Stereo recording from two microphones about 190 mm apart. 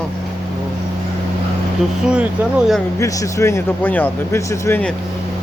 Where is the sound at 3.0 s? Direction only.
15° left (ahead or behind).